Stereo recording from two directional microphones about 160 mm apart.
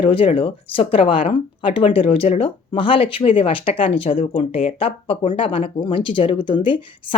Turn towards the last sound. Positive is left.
turn(degrees=30)  # may be behind; listen again after turning